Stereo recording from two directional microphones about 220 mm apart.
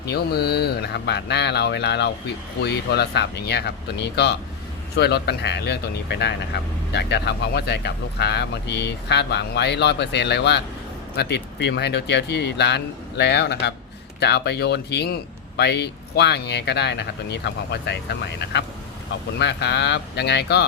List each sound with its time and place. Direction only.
0.1 s speech: 50° left (ahead or behind)